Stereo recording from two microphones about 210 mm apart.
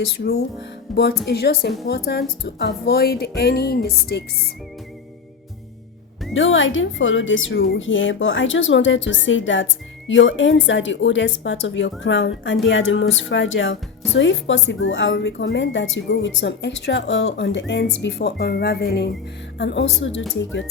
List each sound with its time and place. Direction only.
0.9 s a woman's voice: 50° left (ahead or behind)
6.3 s a woman's voice: 65° left (ahead or behind)